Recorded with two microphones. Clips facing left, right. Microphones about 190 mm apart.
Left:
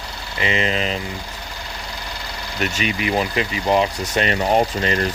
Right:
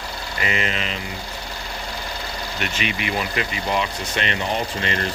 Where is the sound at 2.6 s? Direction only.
40° left (ahead or behind).